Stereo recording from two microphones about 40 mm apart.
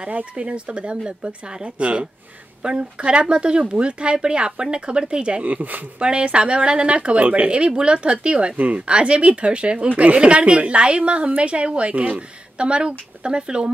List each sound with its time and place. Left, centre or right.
0.0 s speech: right
5.4 s speech: right
5.9 s speech: right
8.5 s speech: right
8.8 s speech: right